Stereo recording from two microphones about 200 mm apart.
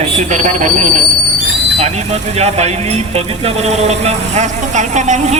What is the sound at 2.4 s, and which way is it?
Speech, 35° right (ahead or behind).